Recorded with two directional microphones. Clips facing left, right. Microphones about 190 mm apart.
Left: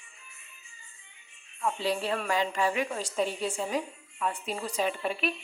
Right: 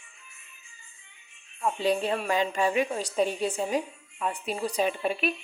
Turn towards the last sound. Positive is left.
turn(degrees=-15)  # may be behind; listen again after turning